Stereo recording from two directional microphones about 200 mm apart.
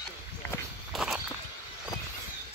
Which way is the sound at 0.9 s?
Centre (ahead or behind).